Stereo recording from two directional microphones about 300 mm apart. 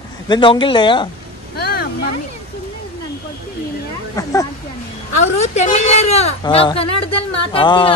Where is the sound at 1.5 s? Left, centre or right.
Left.